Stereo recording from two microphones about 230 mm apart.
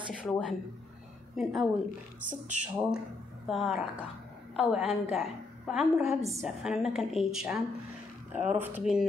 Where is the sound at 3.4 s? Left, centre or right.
Centre.